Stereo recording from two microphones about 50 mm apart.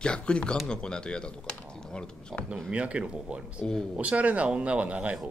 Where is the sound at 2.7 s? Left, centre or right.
Right.